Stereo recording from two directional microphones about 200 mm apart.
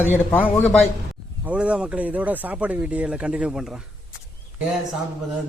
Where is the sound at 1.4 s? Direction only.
5° right (ahead or behind).